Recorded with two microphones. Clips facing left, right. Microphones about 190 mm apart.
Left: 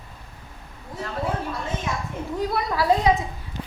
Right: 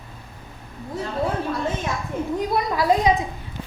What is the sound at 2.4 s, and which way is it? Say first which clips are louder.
Speech: left 1 dB; 20° right (ahead or behind).